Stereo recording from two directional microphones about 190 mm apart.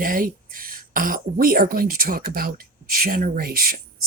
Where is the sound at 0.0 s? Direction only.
45° right (ahead or behind).